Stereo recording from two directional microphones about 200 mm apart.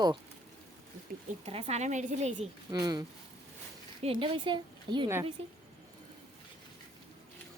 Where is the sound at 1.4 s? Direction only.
30° right (ahead or behind).